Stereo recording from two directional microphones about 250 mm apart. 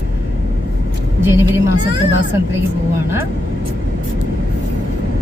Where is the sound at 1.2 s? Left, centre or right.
Centre.